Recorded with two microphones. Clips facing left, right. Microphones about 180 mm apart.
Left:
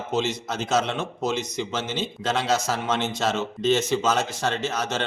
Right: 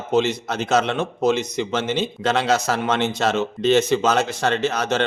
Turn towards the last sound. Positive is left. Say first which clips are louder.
# right 6 dB
turn(degrees=-65)  # may be behind; listen again after turning